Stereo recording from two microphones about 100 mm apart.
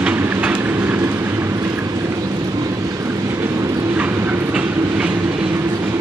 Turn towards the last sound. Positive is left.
turn(degrees=-15)  # may be behind; listen again after turning